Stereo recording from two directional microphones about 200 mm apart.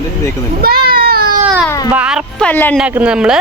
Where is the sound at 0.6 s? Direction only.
50° right (ahead or behind).